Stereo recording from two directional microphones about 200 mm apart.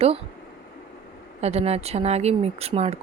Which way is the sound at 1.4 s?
30° right (ahead or behind).